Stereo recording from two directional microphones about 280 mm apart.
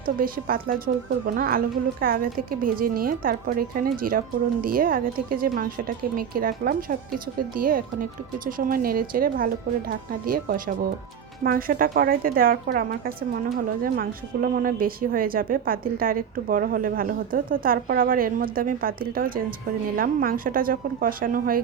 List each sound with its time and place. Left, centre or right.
0.0 s a woman's voice: right